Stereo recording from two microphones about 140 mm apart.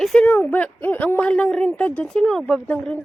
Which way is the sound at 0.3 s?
15° left (ahead or behind).